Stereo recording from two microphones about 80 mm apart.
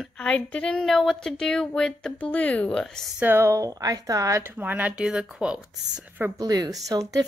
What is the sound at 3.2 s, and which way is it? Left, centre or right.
Speech, right.